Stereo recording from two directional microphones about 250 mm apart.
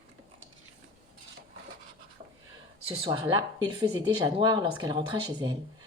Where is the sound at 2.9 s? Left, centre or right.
Right.